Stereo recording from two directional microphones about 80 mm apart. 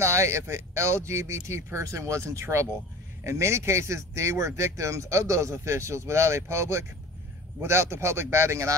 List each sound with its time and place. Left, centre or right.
0.0 s speech: right